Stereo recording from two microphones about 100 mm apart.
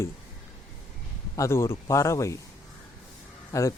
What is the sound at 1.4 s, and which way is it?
Speech, 25° left (ahead or behind).